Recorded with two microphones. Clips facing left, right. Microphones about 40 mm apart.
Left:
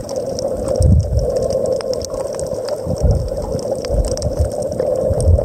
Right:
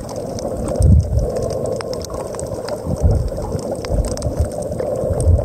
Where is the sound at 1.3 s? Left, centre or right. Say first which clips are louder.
Left 5 dB; right.